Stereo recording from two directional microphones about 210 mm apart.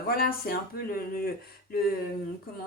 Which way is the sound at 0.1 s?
45° left (ahead or behind).